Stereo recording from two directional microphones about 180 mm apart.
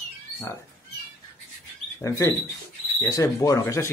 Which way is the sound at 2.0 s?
15° left (ahead or behind).